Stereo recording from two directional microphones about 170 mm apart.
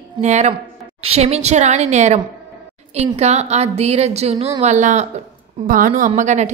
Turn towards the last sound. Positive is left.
turn(degrees=-45)  # may be behind; listen again after turning